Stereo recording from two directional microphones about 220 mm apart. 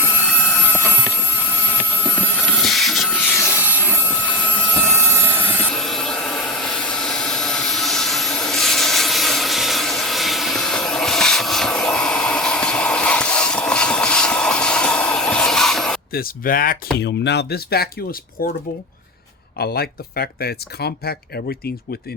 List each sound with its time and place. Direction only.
0.0 s helicopter: 5° right (ahead or behind)
2.0 s vehicle: centre (ahead or behind)
5.6 s vehicle: centre (ahead or behind)
16.1 s speech: 40° left (ahead or behind)
19.5 s speech: 45° left (ahead or behind)